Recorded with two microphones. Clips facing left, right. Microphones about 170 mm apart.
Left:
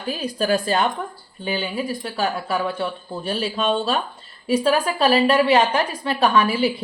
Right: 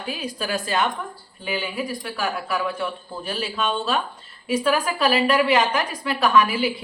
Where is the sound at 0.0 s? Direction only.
40° left (ahead or behind).